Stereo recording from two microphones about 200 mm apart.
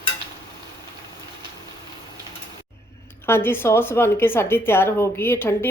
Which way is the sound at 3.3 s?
10° left (ahead or behind).